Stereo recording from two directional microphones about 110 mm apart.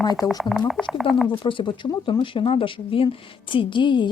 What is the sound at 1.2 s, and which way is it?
Speech, 50° left (ahead or behind).